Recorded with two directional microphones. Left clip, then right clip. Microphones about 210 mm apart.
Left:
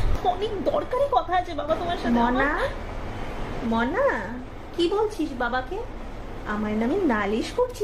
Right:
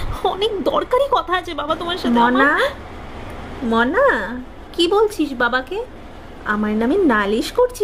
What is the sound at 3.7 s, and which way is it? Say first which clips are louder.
A woman's voice: right 8 dB; 50° right (ahead or behind).